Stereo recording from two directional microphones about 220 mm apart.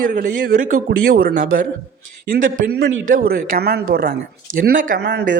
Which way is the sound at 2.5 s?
40° right (ahead or behind).